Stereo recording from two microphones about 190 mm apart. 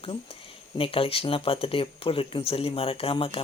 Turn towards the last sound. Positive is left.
turn(degrees=30)  # may be behind; listen again after turning